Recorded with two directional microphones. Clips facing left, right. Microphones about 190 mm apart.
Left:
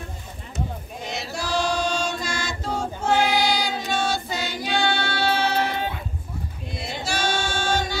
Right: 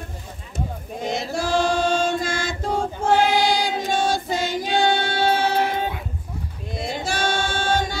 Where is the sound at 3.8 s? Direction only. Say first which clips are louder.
Right 3 dB; 45° right (ahead or behind).